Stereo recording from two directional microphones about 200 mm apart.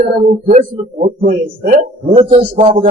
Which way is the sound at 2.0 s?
30° right (ahead or behind).